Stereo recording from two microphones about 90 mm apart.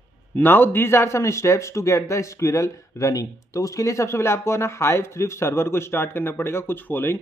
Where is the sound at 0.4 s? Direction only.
20° left (ahead or behind).